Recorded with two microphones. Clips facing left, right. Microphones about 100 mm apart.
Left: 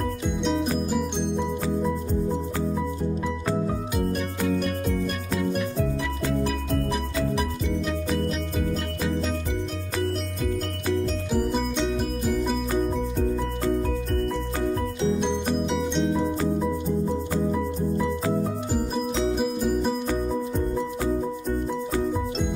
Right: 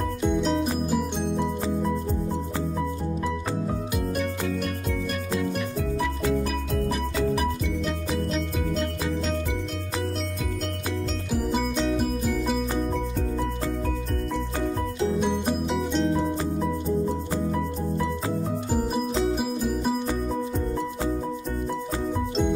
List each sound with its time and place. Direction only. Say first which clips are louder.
0.4 s music: even; centre (ahead or behind)
5.3 s music: left 1 dB; centre (ahead or behind)
8.7 s music: even; 5° left (ahead or behind)
15.6 s music: even; centre (ahead or behind)
19.3 s music: left 2 dB; 5° right (ahead or behind)